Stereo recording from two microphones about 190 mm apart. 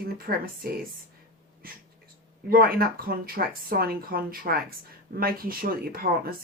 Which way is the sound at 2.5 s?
50° right (ahead or behind).